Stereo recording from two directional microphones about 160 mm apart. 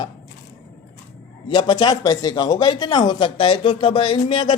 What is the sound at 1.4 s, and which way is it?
Speech, 30° left (ahead or behind).